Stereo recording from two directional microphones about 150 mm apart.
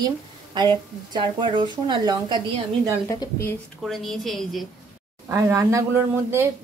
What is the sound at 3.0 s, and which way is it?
Speech, 20° left (ahead or behind).